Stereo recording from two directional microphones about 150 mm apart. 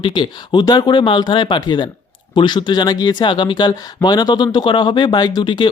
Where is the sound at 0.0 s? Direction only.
30° left (ahead or behind).